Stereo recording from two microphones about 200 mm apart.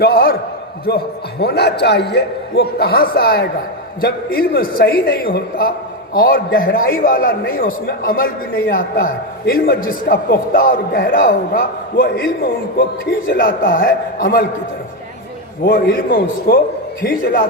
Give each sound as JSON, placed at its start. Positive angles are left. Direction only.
{"t": 0.0, "sound": "a man's voice", "side_deg": 50}
{"t": 13.2, "sound": "a man's voice", "side_deg": 45}
{"t": 15.6, "sound": "a man's voice", "side_deg": 50}